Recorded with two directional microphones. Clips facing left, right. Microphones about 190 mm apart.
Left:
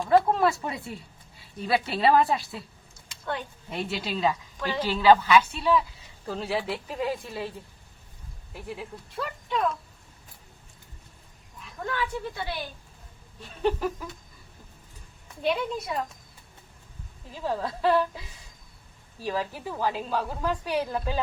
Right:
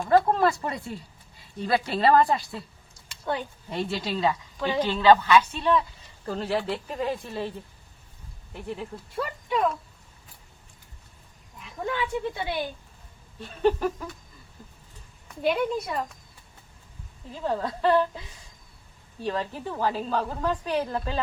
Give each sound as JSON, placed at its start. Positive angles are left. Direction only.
{"t": 0.1, "sound": "speech", "side_deg": 0}
{"t": 3.7, "sound": "a woman's voice", "side_deg": 0}
{"t": 8.5, "sound": "speech", "side_deg": 5}
{"t": 9.1, "sound": "speech", "side_deg": -5}
{"t": 11.9, "sound": "speech", "side_deg": -20}
{"t": 13.4, "sound": "speech", "side_deg": 0}
{"t": 15.4, "sound": "speech", "side_deg": -5}
{"t": 17.3, "sound": "speech", "side_deg": 5}
{"t": 19.2, "sound": "a woman's voice", "side_deg": 5}